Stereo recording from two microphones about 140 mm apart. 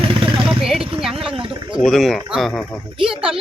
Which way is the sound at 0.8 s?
40° right (ahead or behind).